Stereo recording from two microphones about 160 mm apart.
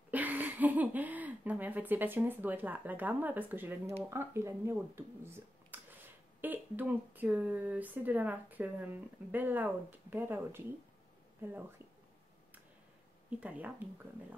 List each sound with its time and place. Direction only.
0.1 s speech: 10° right (ahead or behind)
13.3 s speech: 10° right (ahead or behind)